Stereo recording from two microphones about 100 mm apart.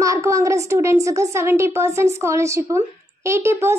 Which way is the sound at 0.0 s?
30° right (ahead or behind).